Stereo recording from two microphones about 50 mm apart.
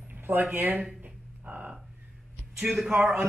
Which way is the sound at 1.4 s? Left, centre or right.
Right.